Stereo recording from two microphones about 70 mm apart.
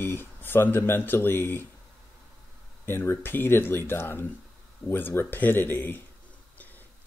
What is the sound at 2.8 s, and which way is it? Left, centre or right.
Speech, left.